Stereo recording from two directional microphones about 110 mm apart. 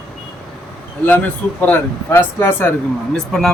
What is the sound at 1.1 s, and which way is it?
Speech, 15° left (ahead or behind).